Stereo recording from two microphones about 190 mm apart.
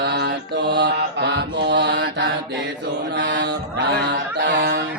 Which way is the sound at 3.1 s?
65° right (ahead or behind).